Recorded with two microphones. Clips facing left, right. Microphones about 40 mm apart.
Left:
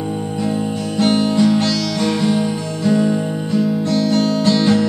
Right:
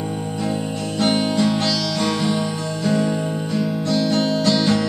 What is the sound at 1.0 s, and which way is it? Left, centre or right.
Music, centre.